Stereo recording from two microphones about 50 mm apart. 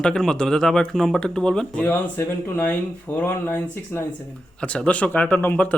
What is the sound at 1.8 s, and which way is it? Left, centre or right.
Speech, left.